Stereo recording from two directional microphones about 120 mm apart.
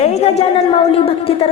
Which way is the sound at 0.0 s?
65° left (ahead or behind).